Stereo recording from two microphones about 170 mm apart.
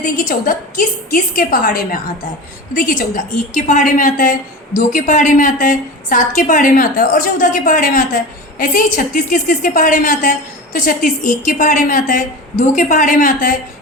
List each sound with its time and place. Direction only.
0.0 s a woman's voice: 55° left (ahead or behind)